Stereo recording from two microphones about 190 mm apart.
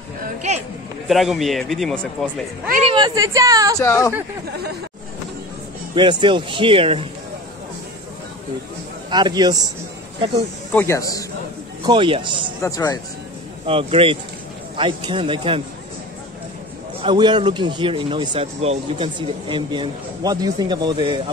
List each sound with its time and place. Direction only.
1.0 s speech: centre (ahead or behind)
2.9 s a woman's voice: 20° right (ahead or behind)
3.8 s speech: 15° left (ahead or behind)
5.9 s speech: 25° right (ahead or behind)
9.1 s speech: 20° right (ahead or behind)
10.7 s a man's voice: 10° left (ahead or behind)
11.8 s speech: 25° right (ahead or behind)
12.6 s speech: 20° left (ahead or behind)
13.7 s speech: 30° right (ahead or behind)
17.0 s speech: 25° right (ahead or behind)